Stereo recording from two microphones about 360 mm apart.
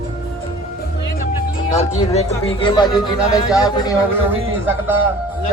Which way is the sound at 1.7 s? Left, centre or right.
Centre.